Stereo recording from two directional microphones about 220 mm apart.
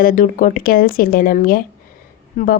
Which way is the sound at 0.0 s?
40° left (ahead or behind).